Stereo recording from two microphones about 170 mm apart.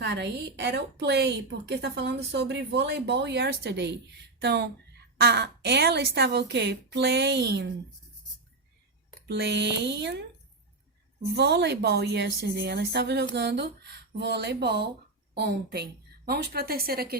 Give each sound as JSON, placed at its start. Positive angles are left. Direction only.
{"t": 0.0, "sound": "a woman's voice", "side_deg": -90}
{"t": 9.2, "sound": "a woman's voice", "side_deg": -80}
{"t": 11.3, "sound": "a woman's voice", "side_deg": -80}